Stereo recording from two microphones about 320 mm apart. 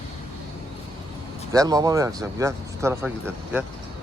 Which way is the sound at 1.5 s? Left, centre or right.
Centre.